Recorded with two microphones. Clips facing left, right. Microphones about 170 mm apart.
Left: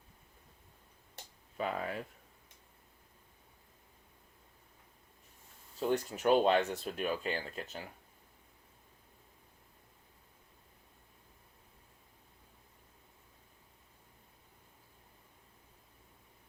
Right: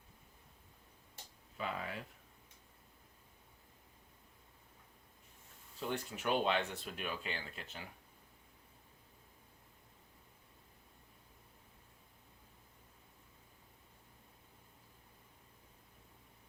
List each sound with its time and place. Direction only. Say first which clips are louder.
1.5 s speech: left 5 dB; 45° left (ahead or behind)
5.8 s speech: left 8 dB; 40° left (ahead or behind)